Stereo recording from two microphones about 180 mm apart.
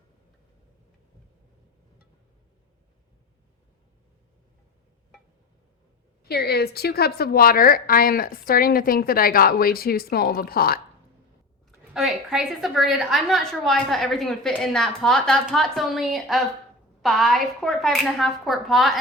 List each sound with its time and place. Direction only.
6.2 s a woman's voice: 60° left (ahead or behind)
11.9 s a woman's voice: centre (ahead or behind)